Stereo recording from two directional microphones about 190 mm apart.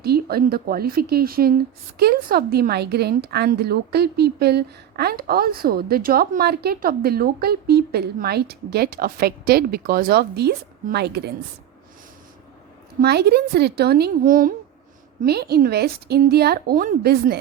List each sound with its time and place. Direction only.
0.0 s a woman's voice: 55° right (ahead or behind)
13.0 s a woman's voice: 55° right (ahead or behind)